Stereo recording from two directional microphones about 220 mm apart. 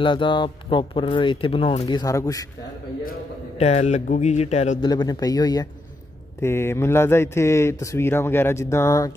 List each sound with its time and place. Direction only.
0.0 s speech: 20° left (ahead or behind)
3.0 s speech: 35° left (ahead or behind)
4.8 s speech: 20° left (ahead or behind)